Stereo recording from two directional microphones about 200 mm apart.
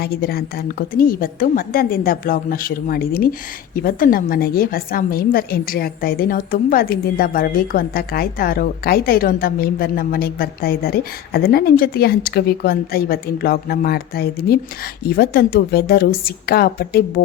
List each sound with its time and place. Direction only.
0.0 s a woman's voice: 50° left (ahead or behind)